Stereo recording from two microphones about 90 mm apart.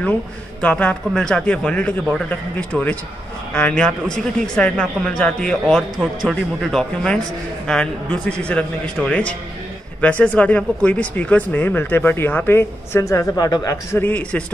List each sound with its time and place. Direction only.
0.6 s a man's voice: 15° left (ahead or behind)
13.0 s speech: 35° left (ahead or behind)
13.9 s speech: 20° left (ahead or behind)